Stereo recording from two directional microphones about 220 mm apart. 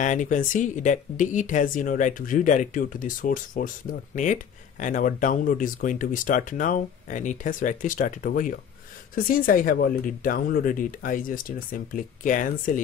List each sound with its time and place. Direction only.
0.0 s speech: 35° left (ahead or behind)